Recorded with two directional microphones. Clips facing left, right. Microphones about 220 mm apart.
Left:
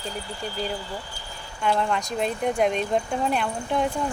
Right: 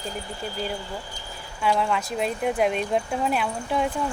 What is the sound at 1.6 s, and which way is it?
Speech, 5° right (ahead or behind).